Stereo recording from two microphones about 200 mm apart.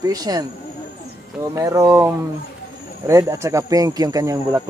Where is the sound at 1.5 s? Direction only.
15° right (ahead or behind).